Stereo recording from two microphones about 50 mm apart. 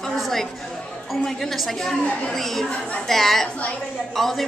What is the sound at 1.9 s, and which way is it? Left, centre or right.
Speech, left.